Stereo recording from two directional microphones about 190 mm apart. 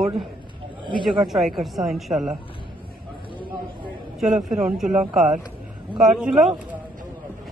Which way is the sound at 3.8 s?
Centre (ahead or behind).